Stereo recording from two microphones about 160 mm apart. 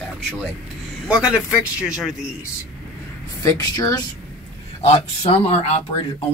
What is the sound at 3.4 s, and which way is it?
Speech, 20° left (ahead or behind).